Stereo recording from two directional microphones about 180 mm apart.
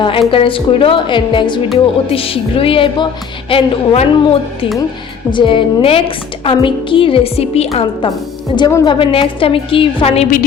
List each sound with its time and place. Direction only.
0.0 s a woman's voice: 30° left (ahead or behind)
8.5 s a woman's voice: 25° left (ahead or behind); by 10.4 s 40° left (ahead or behind)